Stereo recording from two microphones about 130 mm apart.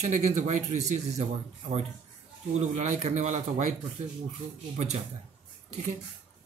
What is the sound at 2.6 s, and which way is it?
Speech, 60° right (ahead or behind).